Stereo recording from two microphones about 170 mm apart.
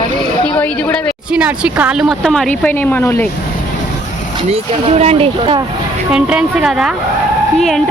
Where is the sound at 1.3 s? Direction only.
5° right (ahead or behind); by 3.2 s 15° left (ahead or behind).